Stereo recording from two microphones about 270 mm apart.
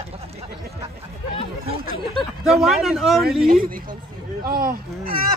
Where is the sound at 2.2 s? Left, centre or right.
Centre.